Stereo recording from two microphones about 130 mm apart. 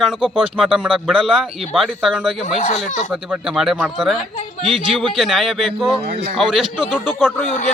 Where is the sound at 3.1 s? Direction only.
10° right (ahead or behind).